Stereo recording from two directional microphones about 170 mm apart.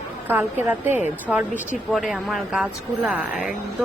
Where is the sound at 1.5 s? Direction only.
50° left (ahead or behind).